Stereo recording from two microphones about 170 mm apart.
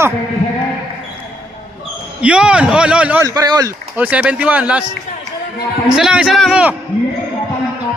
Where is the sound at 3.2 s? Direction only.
20° right (ahead or behind).